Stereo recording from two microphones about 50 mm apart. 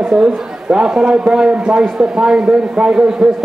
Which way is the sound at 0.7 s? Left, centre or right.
Centre.